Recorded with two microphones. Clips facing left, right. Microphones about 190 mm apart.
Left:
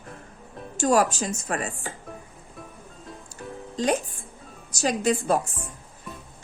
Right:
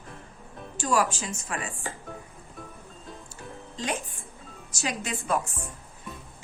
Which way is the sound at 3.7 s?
40° left (ahead or behind).